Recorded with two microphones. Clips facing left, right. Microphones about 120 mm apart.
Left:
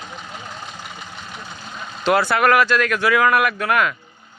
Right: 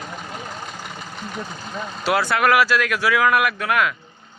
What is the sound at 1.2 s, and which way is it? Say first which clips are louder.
Vehicle: right 5 dB; 45° right (ahead or behind).